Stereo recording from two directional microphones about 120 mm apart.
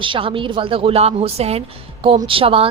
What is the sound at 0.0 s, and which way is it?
A woman's voice, 45° right (ahead or behind).